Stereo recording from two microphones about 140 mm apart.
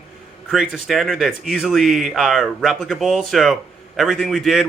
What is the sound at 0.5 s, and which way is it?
Speech, centre (ahead or behind).